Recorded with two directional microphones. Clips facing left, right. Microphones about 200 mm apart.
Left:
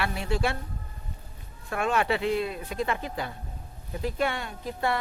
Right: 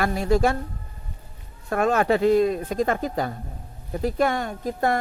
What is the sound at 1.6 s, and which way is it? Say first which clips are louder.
Speech: right 6 dB; 40° right (ahead or behind).